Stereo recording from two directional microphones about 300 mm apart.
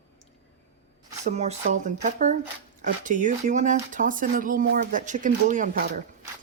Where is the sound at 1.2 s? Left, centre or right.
Right.